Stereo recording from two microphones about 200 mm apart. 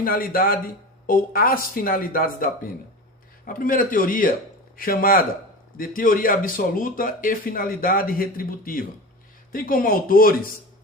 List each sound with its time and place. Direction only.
0.0 s speech: 45° left (ahead or behind)